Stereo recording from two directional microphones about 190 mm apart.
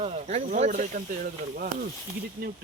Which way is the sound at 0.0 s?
35° right (ahead or behind).